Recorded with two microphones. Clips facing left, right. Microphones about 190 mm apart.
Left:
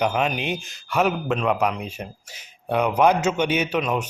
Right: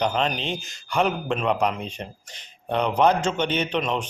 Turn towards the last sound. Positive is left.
turn(degrees=5)  # may be behind; listen again after turning